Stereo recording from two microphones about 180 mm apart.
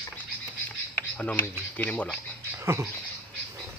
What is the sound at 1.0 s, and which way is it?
Speech, 10° left (ahead or behind).